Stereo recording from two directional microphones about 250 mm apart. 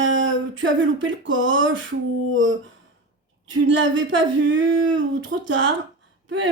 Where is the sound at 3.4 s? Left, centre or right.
Right.